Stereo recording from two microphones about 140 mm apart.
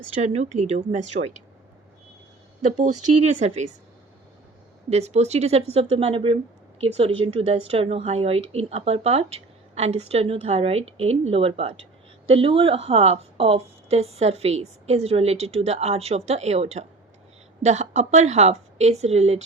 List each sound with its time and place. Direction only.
0.2 s speech: 50° right (ahead or behind)
2.7 s speech: 55° right (ahead or behind)
4.9 s speech: 50° right (ahead or behind)